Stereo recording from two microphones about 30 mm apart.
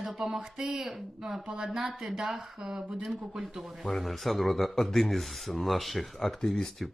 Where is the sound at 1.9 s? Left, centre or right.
Centre.